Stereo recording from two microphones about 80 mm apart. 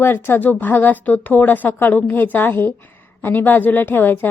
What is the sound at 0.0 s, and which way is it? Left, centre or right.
A woman's voice, left.